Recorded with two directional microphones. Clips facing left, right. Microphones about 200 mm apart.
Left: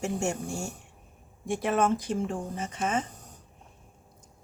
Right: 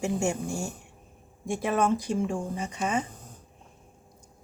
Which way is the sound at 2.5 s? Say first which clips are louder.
Right 1 dB; 15° right (ahead or behind).